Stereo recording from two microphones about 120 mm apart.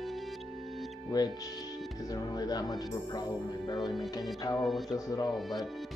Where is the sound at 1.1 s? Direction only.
35° left (ahead or behind).